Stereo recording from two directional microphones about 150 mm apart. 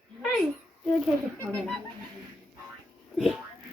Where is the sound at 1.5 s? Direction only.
Centre (ahead or behind).